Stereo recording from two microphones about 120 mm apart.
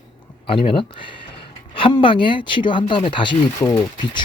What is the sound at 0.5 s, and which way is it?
Speech, 45° left (ahead or behind).